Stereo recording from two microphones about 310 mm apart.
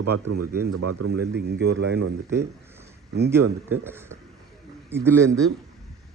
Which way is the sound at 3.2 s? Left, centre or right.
Centre.